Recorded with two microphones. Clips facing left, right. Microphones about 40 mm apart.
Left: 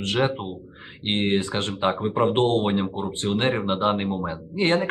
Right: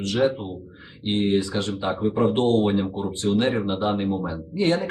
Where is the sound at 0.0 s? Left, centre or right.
Left.